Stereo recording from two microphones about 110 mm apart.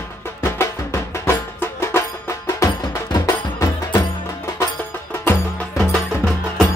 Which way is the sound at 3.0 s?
40° left (ahead or behind).